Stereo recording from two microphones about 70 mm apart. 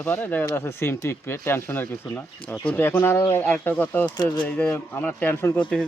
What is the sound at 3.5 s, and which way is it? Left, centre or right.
Speech, left.